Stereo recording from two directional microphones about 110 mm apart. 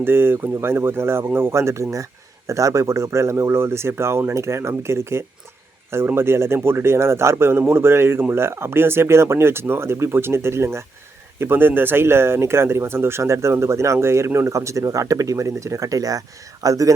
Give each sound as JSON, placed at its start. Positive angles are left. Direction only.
{"t": 0.0, "sound": "speech", "side_deg": -20}